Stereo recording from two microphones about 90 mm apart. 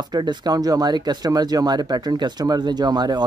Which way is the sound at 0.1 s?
55° right (ahead or behind).